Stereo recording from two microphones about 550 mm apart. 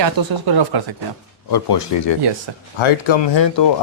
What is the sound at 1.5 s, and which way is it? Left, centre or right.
Speech, left.